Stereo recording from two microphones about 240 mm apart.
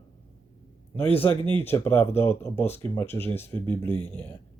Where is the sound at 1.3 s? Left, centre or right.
Right.